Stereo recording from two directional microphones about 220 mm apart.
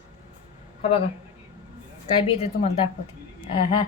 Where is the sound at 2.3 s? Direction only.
25° left (ahead or behind).